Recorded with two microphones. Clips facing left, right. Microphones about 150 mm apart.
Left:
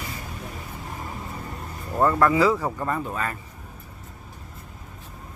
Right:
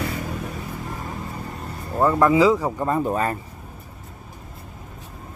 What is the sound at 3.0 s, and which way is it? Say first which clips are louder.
Speech: right 7 dB; 35° right (ahead or behind).